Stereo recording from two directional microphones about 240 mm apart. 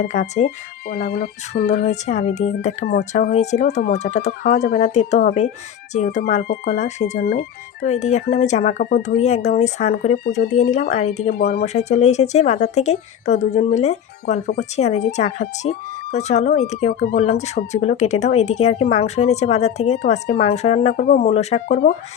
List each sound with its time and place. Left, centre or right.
0.1 s a woman's voice: left
10.2 s a woman's voice: left
11.6 s a woman's voice: left
17.2 s a woman's voice: left
20.9 s speech: left
21.2 s a woman's voice: left
21.7 s speech: left